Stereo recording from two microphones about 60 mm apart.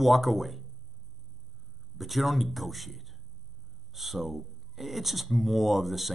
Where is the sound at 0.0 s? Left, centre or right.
Centre.